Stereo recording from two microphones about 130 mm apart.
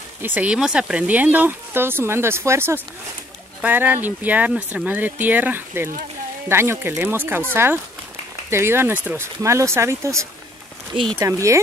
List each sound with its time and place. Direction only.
0.2 s speech: 15° right (ahead or behind)